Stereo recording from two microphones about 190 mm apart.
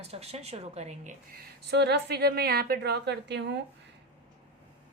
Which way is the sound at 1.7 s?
60° right (ahead or behind).